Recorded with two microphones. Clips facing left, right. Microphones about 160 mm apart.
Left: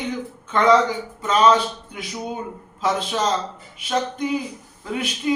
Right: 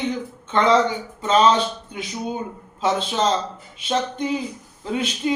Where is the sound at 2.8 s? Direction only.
25° right (ahead or behind).